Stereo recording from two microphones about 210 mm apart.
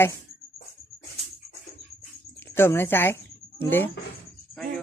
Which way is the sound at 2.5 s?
10° left (ahead or behind).